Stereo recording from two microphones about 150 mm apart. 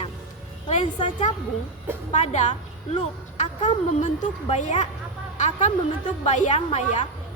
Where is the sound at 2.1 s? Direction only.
50° left (ahead or behind).